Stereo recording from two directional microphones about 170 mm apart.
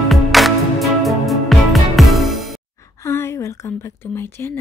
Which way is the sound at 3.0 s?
15° left (ahead or behind).